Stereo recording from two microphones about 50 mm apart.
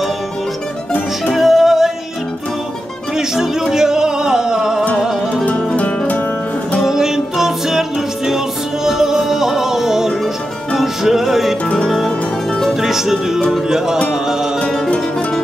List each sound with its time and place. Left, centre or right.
1.3 s music: centre
3.2 s music: centre
5.4 s music: left
6.8 s music: centre
8.8 s music: centre
12.8 s music: centre